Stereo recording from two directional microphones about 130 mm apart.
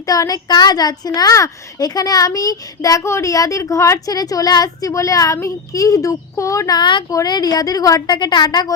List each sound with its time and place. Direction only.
0.0 s a woman's voice: 25° left (ahead or behind)